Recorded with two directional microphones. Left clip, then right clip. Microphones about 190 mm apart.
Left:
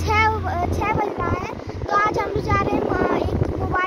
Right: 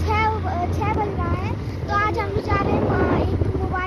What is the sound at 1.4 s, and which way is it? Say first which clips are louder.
Boat: left 1 dB; 15° left (ahead or behind).